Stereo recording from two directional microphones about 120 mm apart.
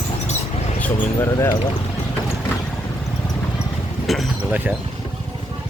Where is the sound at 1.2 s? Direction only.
25° left (ahead or behind).